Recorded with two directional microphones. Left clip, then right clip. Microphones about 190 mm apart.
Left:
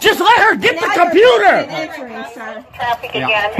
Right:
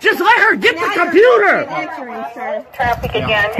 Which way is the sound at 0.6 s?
25° left (ahead or behind).